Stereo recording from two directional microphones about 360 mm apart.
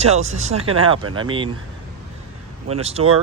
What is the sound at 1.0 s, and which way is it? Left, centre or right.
Speech, right.